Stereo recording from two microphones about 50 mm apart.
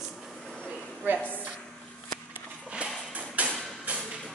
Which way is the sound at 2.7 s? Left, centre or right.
Right.